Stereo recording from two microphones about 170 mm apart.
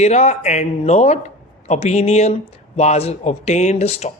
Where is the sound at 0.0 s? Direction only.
40° left (ahead or behind).